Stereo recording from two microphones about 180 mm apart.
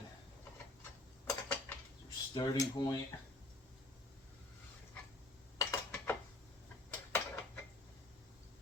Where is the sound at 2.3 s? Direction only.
20° left (ahead or behind).